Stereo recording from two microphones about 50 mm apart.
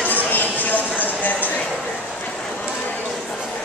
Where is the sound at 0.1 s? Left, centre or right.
Left.